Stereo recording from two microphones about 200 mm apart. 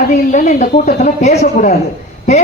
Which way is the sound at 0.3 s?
40° left (ahead or behind).